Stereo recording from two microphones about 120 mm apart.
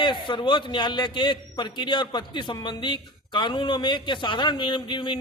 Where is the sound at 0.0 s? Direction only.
40° left (ahead or behind).